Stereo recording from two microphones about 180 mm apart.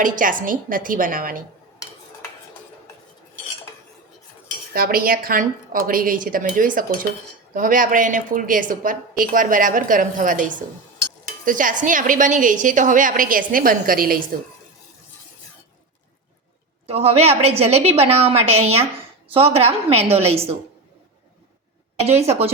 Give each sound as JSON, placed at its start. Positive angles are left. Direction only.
{"t": 0.0, "sound": "a woman's voice", "side_deg": -50}
{"t": 4.7, "sound": "a woman's voice", "side_deg": -55}
{"t": 11.4, "sound": "a woman's voice", "side_deg": -45}
{"t": 16.8, "sound": "a woman's voice", "side_deg": -35}
{"t": 22.0, "sound": "a woman's voice", "side_deg": -35}